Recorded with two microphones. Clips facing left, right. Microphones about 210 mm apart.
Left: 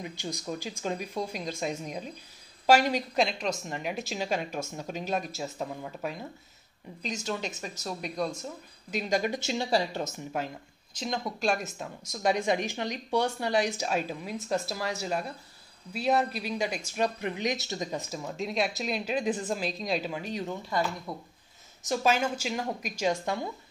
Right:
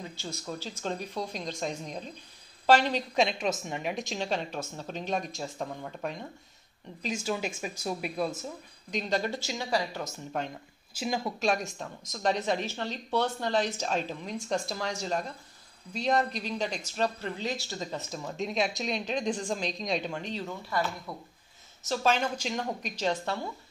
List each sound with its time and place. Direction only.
0.0 s a woman's voice: 15° left (ahead or behind)
7.0 s speech: 5° right (ahead or behind)
8.9 s speech: 10° left (ahead or behind)
9.5 s speech: 30° left (ahead or behind)
10.4 s speech: 5° left (ahead or behind)
10.9 s speech: 5° right (ahead or behind)
20.7 s speech: 20° left (ahead or behind)
21.8 s speech: 10° left (ahead or behind)